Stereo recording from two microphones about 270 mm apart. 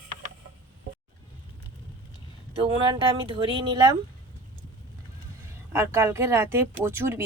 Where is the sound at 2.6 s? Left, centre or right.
Centre.